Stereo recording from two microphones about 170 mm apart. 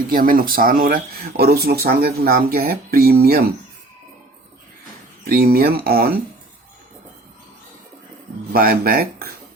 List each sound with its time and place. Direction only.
0.1 s speech: 55° right (ahead or behind)
5.2 s speech: 60° right (ahead or behind)
8.5 s speech: 60° right (ahead or behind)